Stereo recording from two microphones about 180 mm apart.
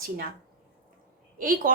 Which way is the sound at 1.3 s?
50° right (ahead or behind).